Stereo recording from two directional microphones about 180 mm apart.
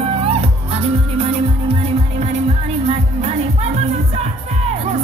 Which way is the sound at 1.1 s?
35° right (ahead or behind).